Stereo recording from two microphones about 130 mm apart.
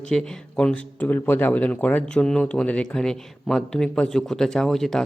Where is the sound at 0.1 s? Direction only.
5° left (ahead or behind).